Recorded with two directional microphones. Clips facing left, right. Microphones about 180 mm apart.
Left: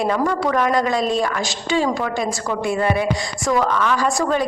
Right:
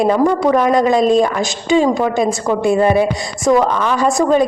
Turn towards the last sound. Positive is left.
turn(degrees=-20)  # may be behind; listen again after turning